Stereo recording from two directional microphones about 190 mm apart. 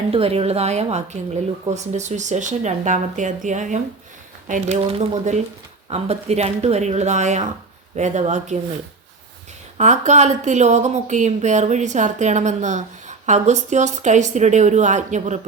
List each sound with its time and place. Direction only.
0.1 s a woman's voice: 30° right (ahead or behind)
9.7 s a woman's voice: 40° right (ahead or behind)